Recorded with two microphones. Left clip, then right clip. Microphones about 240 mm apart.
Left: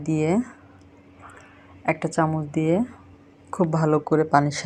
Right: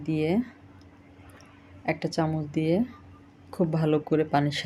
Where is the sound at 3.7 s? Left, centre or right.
Centre.